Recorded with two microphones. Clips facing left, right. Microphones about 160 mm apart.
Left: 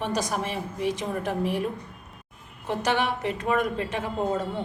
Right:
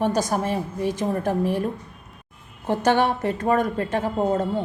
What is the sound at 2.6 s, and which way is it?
A woman's voice, 45° right (ahead or behind).